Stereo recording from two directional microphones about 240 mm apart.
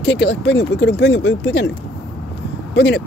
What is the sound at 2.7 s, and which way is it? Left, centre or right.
Speech, left.